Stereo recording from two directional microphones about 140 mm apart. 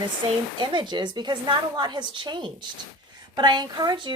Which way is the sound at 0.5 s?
35° right (ahead or behind).